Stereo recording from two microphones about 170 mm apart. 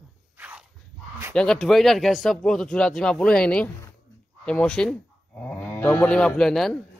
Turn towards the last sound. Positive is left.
turn(degrees=5)  # may be behind; listen again after turning